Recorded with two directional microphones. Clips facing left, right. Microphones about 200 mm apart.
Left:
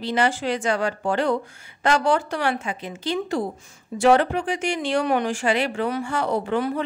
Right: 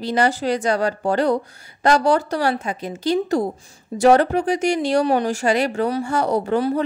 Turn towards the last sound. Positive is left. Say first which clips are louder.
# right 4 dB
turn(degrees=-40)  # may be behind; listen again after turning